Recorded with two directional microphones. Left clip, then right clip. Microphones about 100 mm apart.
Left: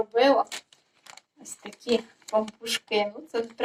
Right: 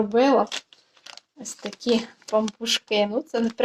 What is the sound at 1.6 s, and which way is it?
Speech, 35° right (ahead or behind).